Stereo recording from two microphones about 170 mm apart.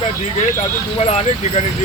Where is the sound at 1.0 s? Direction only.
35° left (ahead or behind).